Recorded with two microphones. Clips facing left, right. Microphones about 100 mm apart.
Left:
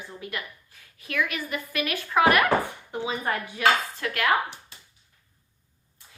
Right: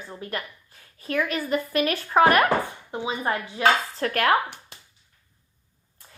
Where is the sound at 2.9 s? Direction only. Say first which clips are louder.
Right 2 dB; 25° right (ahead or behind); by 4.3 s 40° right (ahead or behind).